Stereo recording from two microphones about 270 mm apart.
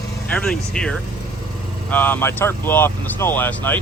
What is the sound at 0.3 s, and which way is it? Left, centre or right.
Speech, centre.